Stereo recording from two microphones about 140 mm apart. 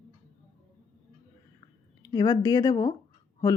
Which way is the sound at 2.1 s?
30° left (ahead or behind).